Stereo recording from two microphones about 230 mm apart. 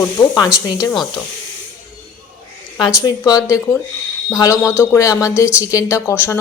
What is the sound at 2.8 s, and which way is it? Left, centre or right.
Speech, centre.